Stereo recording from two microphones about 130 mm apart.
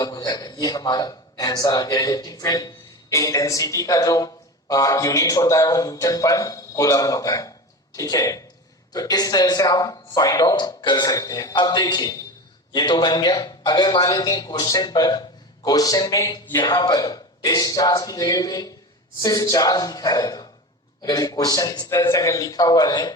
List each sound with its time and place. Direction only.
0.0 s a man's voice: 30° left (ahead or behind)